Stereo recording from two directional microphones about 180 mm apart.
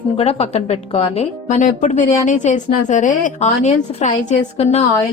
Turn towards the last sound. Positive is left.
turn(degrees=35)  # may be behind; listen again after turning